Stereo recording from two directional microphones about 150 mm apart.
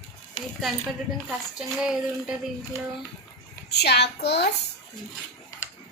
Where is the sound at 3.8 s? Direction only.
90° left.